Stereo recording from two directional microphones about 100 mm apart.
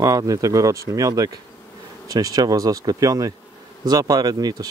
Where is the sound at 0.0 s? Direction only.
35° right (ahead or behind).